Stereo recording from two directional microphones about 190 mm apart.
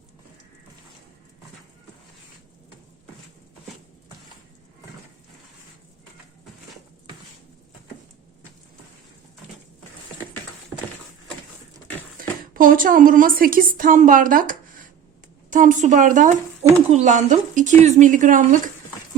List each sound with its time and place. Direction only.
12.1 s a woman's voice: 45° right (ahead or behind)